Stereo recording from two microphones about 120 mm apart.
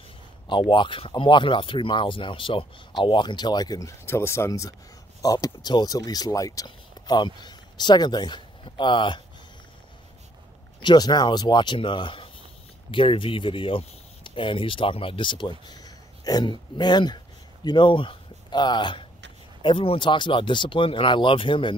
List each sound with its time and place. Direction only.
0.5 s speech: 40° left (ahead or behind)
4.0 s speech: 20° left (ahead or behind); by 9.2 s 40° left (ahead or behind)
10.8 s speech: 40° left (ahead or behind)